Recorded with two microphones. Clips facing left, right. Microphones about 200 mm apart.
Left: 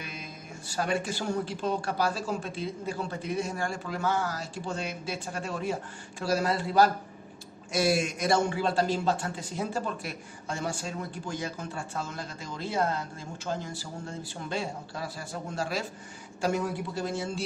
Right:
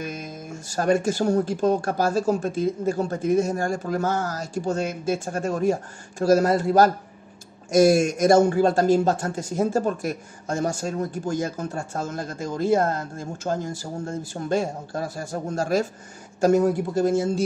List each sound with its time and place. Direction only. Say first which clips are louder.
0.0 s a man's voice: right 9 dB; 45° right (ahead or behind)